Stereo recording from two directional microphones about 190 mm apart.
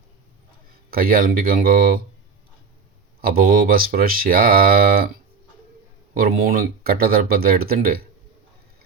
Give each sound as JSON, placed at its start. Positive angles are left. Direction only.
{"t": 0.9, "sound": "speech", "side_deg": -50}
{"t": 3.2, "sound": "speech", "side_deg": -50}
{"t": 6.1, "sound": "speech", "side_deg": -50}